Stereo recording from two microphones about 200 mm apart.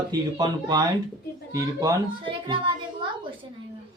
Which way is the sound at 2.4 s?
25° right (ahead or behind).